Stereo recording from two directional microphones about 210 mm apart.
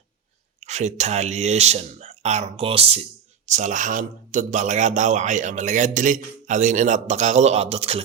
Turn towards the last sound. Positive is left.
turn(degrees=-30)  # may be behind; listen again after turning